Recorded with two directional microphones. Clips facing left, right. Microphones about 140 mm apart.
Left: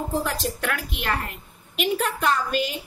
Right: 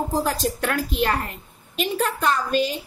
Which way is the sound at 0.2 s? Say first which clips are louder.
Right 4 dB; 35° right (ahead or behind).